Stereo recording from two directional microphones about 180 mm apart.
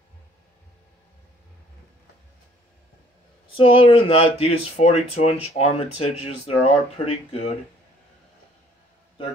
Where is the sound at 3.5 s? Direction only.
30° left (ahead or behind).